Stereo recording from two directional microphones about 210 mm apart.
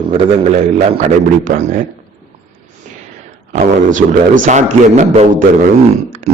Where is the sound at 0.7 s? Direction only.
40° right (ahead or behind).